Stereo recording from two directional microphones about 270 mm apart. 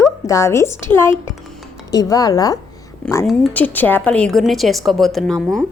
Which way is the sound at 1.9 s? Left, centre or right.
Centre.